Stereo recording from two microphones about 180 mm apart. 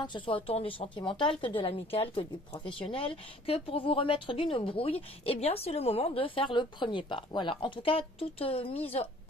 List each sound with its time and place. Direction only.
0.0 s speech: 25° left (ahead or behind)